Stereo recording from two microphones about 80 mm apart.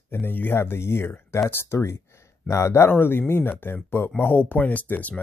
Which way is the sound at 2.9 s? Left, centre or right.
Left.